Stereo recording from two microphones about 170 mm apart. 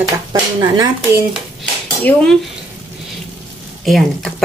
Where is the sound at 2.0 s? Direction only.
10° left (ahead or behind).